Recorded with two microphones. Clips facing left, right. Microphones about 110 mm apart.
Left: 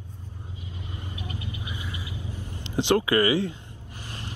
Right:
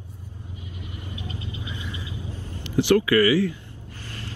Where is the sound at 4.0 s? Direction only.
15° left (ahead or behind).